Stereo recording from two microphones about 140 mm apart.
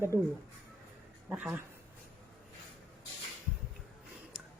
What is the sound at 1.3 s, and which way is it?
Speech, 10° right (ahead or behind).